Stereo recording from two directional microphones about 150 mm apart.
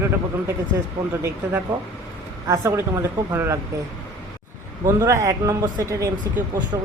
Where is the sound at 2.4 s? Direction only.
20° right (ahead or behind).